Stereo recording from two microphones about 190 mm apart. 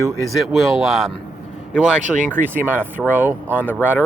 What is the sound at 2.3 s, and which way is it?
Speech, 10° right (ahead or behind).